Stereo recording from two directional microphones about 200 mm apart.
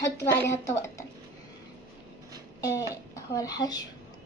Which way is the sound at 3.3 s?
15° left (ahead or behind).